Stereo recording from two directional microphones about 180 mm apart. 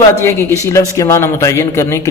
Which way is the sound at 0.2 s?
15° left (ahead or behind).